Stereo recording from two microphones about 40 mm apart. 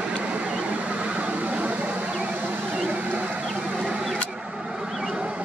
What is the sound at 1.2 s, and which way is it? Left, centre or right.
Vehicle, right.